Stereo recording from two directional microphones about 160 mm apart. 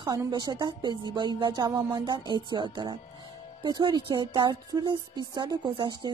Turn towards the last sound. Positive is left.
turn(degrees=-30)  # may be behind; listen again after turning